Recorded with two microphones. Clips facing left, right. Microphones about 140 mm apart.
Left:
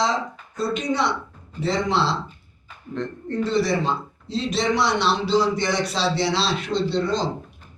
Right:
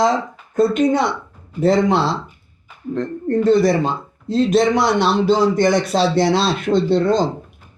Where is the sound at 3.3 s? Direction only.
50° right (ahead or behind).